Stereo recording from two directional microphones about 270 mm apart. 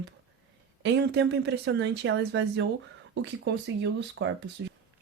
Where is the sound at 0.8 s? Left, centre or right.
Right.